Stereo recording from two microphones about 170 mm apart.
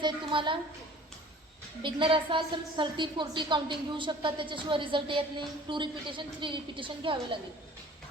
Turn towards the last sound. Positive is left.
turn(degrees=-30)  # may be behind; listen again after turning